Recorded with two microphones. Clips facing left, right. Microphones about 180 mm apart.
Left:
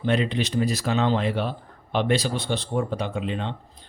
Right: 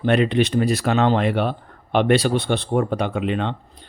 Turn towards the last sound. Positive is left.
turn(degrees=-65)  # may be behind; listen again after turning